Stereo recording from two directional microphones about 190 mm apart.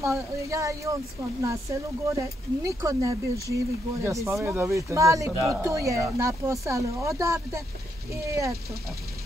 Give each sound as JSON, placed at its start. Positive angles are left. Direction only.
{"t": 0.0, "sound": "speech", "side_deg": -15}